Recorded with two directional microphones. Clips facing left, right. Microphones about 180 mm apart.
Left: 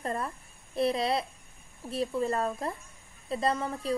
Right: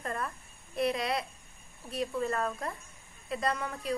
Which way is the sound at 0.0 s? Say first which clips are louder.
Left 3 dB; 25° left (ahead or behind).